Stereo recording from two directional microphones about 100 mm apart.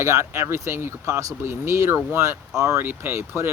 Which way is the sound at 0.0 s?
30° right (ahead or behind).